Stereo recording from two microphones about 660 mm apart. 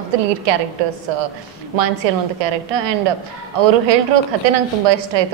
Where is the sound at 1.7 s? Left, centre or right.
Right.